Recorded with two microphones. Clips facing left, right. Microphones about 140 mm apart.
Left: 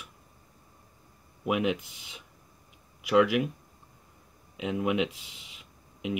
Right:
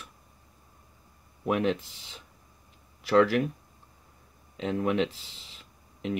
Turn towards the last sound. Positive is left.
turn(degrees=5)  # may be behind; listen again after turning